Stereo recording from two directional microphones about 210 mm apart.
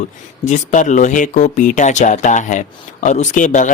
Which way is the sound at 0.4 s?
35° left (ahead or behind).